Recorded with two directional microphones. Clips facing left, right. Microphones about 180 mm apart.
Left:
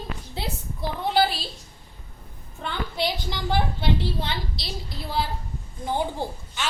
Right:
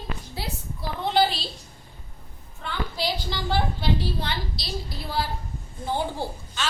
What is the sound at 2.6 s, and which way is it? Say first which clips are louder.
A woman's voice: left 2 dB; 20° left (ahead or behind).